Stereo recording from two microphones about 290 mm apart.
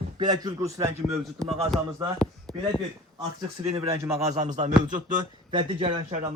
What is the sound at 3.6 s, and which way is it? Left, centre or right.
Speech, right.